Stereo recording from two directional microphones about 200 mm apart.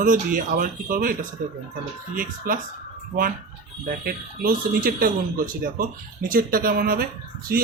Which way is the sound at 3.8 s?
45° right (ahead or behind).